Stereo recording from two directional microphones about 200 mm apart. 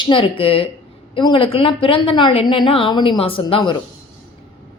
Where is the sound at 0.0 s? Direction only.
25° left (ahead or behind).